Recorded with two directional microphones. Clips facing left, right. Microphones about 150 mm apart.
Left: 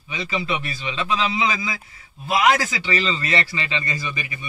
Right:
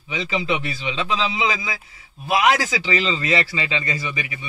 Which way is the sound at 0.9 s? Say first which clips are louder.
Left 1 dB; 15° right (ahead or behind).